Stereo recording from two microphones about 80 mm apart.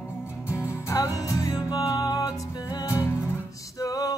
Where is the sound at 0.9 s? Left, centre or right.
Left.